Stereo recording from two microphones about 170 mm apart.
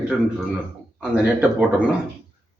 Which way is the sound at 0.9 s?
10° right (ahead or behind).